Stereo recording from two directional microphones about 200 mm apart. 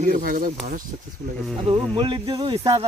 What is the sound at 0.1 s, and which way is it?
Speech, 45° right (ahead or behind).